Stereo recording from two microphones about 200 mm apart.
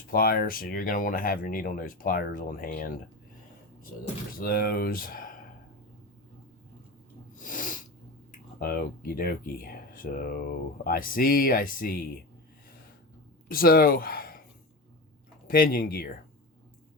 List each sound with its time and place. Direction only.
0.1 s speech: 50° left (ahead or behind)
4.4 s speech: 45° left (ahead or behind)
7.3 s snort: 40° left (ahead or behind)
8.6 s speech: 45° left (ahead or behind)
13.5 s speech: 45° left (ahead or behind)
15.4 s speech: 45° left (ahead or behind)